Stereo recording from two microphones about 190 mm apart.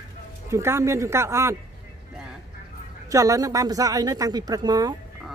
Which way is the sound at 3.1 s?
15° right (ahead or behind).